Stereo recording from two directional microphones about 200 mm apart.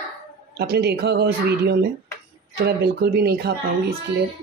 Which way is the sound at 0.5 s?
50° right (ahead or behind).